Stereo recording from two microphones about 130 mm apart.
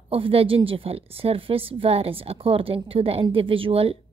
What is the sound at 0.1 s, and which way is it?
Speech, 50° right (ahead or behind).